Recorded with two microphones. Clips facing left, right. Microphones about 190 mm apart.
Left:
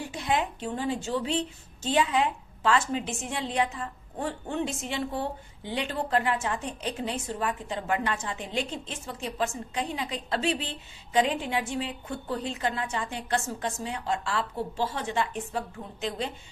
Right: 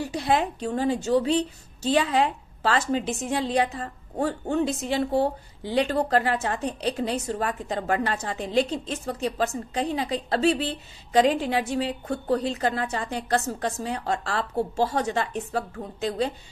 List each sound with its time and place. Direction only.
0.0 s a woman's voice: 35° right (ahead or behind)